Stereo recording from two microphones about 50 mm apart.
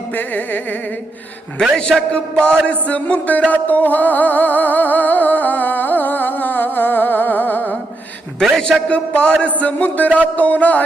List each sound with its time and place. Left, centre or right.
0.2 s a man's voice: left
1.7 s a sound: centre
2.6 s music: left
8.9 s music: left
9.4 s a man's voice: left